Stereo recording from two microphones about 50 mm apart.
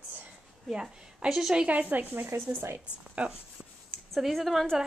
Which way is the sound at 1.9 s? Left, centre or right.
Right.